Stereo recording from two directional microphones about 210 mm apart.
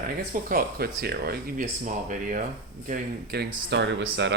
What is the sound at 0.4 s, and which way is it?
Speech, 45° right (ahead or behind).